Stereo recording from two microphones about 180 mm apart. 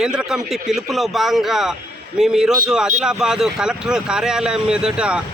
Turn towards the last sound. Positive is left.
turn(degrees=-5)  # may be behind; listen again after turning